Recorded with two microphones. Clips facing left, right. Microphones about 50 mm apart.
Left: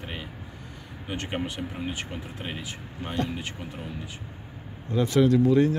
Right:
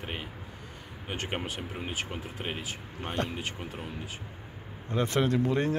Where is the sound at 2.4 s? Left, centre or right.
Centre.